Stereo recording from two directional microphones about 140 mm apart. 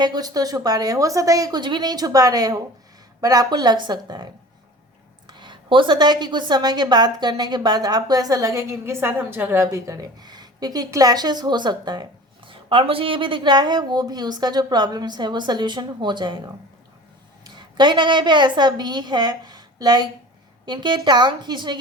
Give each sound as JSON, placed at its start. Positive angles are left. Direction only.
{"t": 0.0, "sound": "a woman's voice", "side_deg": -30}
{"t": 5.3, "sound": "a woman's voice", "side_deg": -35}
{"t": 17.4, "sound": "a woman's voice", "side_deg": -30}